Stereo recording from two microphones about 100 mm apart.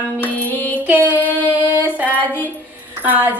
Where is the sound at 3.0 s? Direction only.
20° right (ahead or behind).